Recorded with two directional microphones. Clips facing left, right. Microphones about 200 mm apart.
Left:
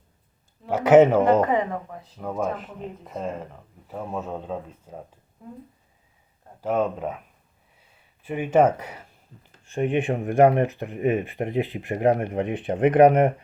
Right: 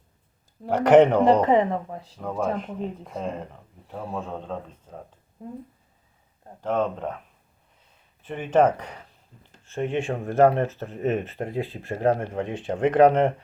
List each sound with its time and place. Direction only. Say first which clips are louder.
0.7 s speech: left 1 dB; 5° left (ahead or behind)
1.5 s a woman's voice: right 4 dB; 25° right (ahead or behind)
2.1 s speech: right 1 dB; 5° left (ahead or behind)
6.6 s speech: left 1 dB; 10° left (ahead or behind)